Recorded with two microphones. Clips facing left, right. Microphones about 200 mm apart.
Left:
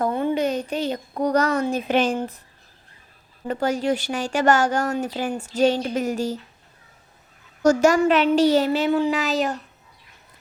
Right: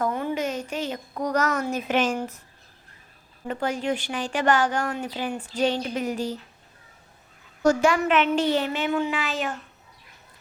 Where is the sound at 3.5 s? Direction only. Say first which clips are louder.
Left 4 dB; 40° left (ahead or behind).